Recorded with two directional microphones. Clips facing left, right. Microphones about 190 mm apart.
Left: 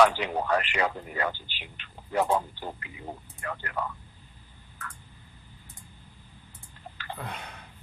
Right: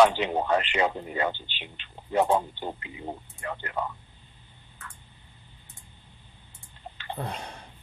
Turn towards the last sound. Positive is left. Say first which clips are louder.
# right 4 dB
turn(degrees=-30)  # may be behind; listen again after turning